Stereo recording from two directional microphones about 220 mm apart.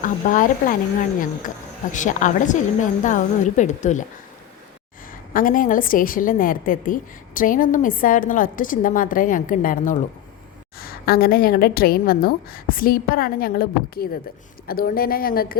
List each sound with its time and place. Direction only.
0.0 s a woman's voice: 35° left (ahead or behind)
1.9 s a woman's voice: 35° left (ahead or behind)
5.3 s a woman's voice: 40° left (ahead or behind)